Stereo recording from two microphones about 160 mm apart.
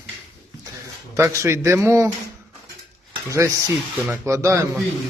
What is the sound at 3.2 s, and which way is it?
A man's voice, 20° right (ahead or behind).